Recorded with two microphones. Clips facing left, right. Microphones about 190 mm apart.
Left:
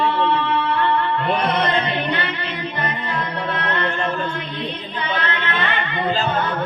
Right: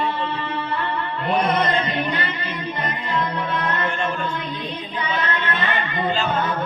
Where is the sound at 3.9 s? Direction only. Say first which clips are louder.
Left 2 dB; 35° left (ahead or behind).